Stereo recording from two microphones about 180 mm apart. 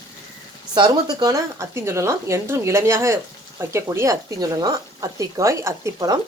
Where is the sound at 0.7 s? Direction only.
25° right (ahead or behind).